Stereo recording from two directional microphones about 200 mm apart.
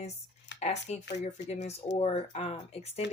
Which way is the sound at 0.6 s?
35° left (ahead or behind).